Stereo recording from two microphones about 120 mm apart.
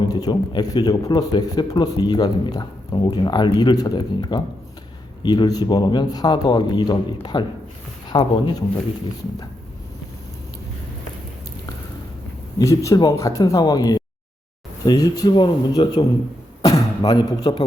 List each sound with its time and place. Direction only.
0.1 s a man's voice: 35° left (ahead or behind)
12.5 s a man's voice: 30° left (ahead or behind)